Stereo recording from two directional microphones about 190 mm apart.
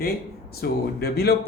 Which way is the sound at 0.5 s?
55° left (ahead or behind).